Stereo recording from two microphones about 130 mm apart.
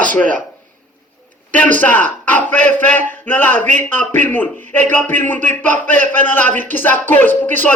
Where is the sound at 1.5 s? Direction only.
10° left (ahead or behind).